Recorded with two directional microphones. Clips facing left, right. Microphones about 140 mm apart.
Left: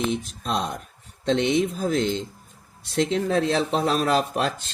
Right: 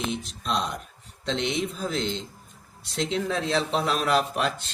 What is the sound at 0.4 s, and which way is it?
Mantra, 45° left (ahead or behind).